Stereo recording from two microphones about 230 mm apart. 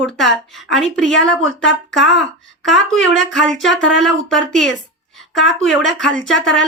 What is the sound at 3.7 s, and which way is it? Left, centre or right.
Speech, left.